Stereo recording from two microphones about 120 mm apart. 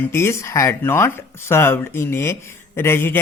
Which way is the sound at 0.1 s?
20° left (ahead or behind).